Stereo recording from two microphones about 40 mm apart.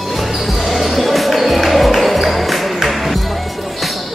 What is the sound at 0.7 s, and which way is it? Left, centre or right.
Music, centre.